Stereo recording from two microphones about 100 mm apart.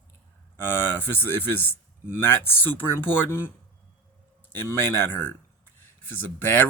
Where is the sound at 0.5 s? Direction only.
20° left (ahead or behind).